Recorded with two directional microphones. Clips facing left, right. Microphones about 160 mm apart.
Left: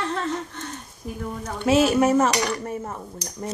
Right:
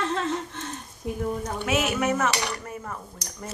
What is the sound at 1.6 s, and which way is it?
Speech, 30° left (ahead or behind).